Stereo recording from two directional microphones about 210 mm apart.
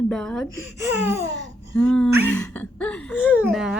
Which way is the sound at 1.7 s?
5° left (ahead or behind).